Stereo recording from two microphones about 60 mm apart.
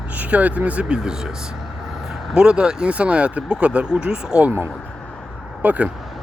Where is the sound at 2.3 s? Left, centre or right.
Centre.